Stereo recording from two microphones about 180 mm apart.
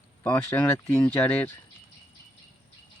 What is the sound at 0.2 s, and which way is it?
Speech, 10° left (ahead or behind).